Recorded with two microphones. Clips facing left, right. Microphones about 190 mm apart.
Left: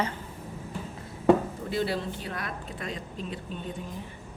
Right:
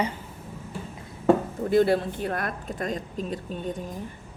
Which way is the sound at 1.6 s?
50° right (ahead or behind).